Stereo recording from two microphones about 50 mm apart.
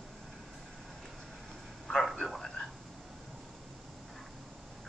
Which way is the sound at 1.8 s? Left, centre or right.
Centre.